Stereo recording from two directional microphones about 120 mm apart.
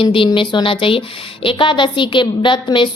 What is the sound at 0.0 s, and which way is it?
A woman's voice, 45° left (ahead or behind).